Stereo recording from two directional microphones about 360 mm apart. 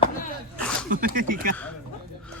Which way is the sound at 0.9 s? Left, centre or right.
Right.